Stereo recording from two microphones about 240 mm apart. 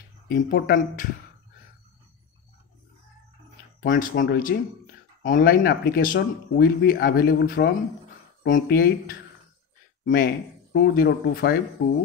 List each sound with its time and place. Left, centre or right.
0.3 s speech: left
3.8 s speech: left